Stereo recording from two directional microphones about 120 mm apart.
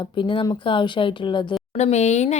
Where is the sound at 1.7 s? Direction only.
70° left (ahead or behind).